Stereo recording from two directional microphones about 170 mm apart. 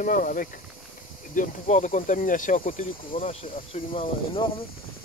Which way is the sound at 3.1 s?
35° left (ahead or behind).